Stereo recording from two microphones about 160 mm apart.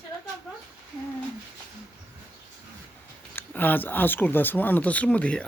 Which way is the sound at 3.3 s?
10° left (ahead or behind).